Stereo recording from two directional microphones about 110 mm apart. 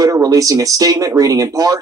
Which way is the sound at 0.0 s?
35° right (ahead or behind).